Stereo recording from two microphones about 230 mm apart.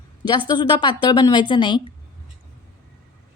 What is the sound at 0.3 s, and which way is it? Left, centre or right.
A woman's voice, centre.